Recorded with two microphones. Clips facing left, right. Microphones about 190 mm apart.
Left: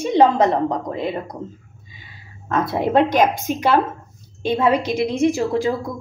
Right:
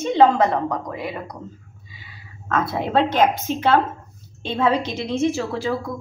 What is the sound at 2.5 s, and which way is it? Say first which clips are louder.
A woman's voice: left 3 dB; 20° left (ahead or behind).